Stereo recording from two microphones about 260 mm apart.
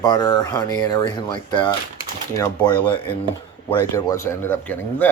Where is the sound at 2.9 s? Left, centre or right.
Centre.